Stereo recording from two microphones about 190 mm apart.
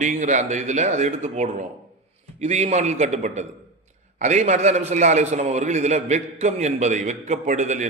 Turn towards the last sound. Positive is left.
turn(degrees=-40)  # may be behind; listen again after turning